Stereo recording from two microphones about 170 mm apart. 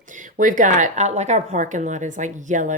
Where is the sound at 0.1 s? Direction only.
50° right (ahead or behind).